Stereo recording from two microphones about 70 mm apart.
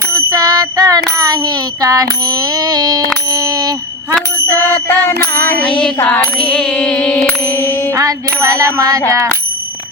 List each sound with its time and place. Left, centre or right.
0.3 s bicycle bell: right
3.2 s bicycle bell: right
4.6 s music: left
6.4 s music: centre
7.5 s music: left
7.9 s bicycle bell: right